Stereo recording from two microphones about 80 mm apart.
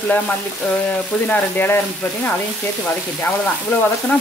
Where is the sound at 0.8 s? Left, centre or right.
Left.